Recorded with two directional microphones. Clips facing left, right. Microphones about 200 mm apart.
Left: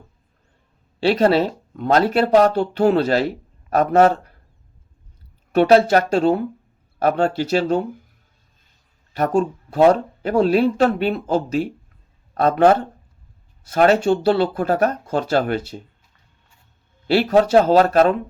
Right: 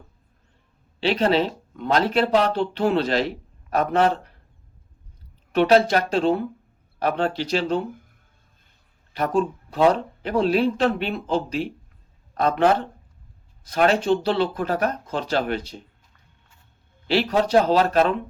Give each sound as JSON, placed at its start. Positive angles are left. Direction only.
{"t": 0.9, "sound": "speech", "side_deg": 45}
{"t": 5.5, "sound": "speech", "side_deg": 45}
{"t": 9.1, "sound": "speech", "side_deg": 45}
{"t": 17.7, "sound": "speech", "side_deg": 45}